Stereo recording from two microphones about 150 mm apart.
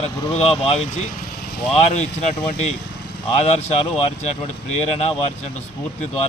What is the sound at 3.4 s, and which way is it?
Speech, 45° left (ahead or behind).